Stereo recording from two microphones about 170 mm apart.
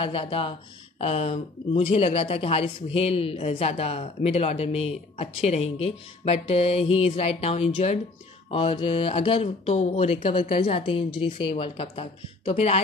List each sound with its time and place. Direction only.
0.0 s speech: 35° left (ahead or behind)